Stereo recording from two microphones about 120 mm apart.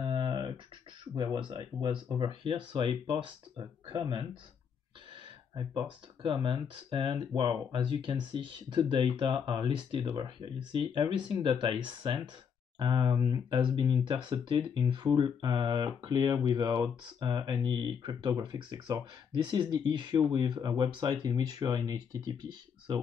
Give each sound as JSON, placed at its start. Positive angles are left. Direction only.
{"t": 0.0, "sound": "a sound", "side_deg": -40}
{"t": 1.1, "sound": "speech", "side_deg": -40}
{"t": 5.5, "sound": "speech", "side_deg": -40}
{"t": 13.2, "sound": "speech", "side_deg": -30}